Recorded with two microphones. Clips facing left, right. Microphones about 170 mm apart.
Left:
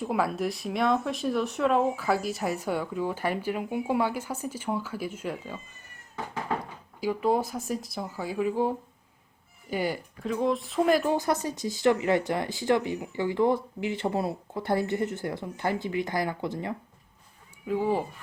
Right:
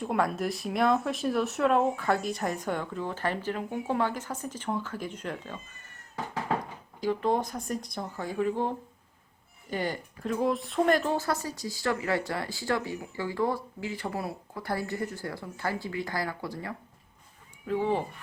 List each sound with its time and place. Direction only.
0.0 s speech: centre (ahead or behind)
7.0 s speech: 5° left (ahead or behind)
10.2 s speech: centre (ahead or behind); by 16.7 s 20° left (ahead or behind)
17.7 s speech: 10° left (ahead or behind)